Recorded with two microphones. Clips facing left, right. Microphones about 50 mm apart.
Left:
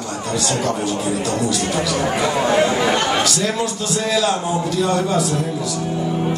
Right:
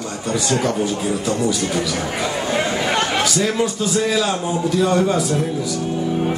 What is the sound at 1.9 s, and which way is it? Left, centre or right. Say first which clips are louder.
Speech: left 4 dB; left.